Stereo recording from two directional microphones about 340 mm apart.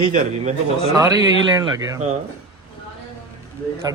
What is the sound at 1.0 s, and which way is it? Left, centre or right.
Speech, centre.